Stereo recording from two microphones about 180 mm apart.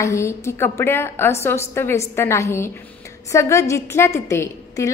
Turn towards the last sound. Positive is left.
turn(degrees=15)  # may be behind; listen again after turning